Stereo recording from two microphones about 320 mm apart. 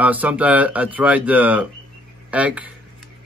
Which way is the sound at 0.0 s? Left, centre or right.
Centre.